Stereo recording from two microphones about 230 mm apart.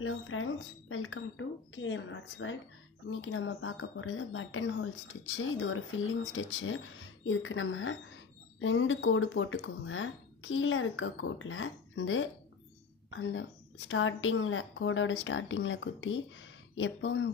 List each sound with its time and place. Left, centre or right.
0.0 s a woman's voice: left